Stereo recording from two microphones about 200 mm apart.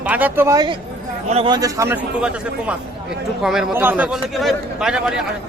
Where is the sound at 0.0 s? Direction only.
10° right (ahead or behind).